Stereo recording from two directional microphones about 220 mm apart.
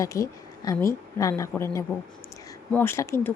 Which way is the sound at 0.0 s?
15° left (ahead or behind).